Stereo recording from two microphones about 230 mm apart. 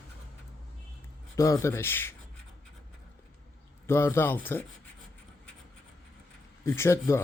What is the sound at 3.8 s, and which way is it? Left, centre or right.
Speech, centre.